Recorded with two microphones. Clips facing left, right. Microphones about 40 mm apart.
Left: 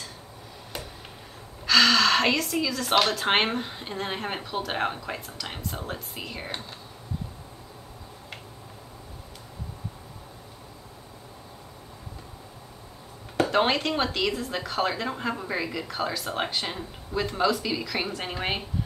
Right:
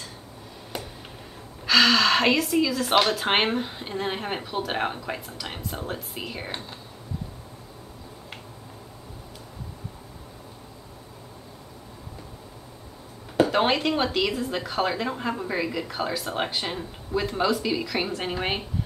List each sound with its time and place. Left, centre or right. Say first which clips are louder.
1.7 s speech: right 1 dB; centre
13.4 s speech: right 2 dB; centre